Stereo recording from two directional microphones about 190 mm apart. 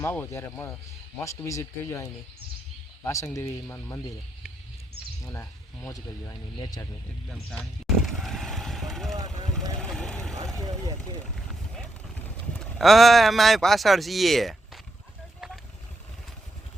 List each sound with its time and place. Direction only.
0.0 s speech: 10° left (ahead or behind)
5.2 s speech: 15° left (ahead or behind)
7.3 s vehicle: centre (ahead or behind)
12.5 s speech: centre (ahead or behind)